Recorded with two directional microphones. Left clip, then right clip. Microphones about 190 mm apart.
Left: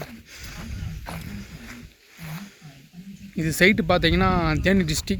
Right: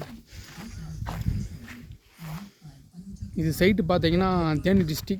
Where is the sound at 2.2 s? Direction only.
5° right (ahead or behind).